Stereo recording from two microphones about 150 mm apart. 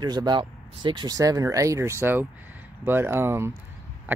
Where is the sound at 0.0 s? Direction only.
30° right (ahead or behind).